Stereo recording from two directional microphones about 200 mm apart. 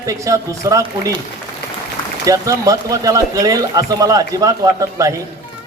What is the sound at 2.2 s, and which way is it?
A man's voice, 15° right (ahead or behind).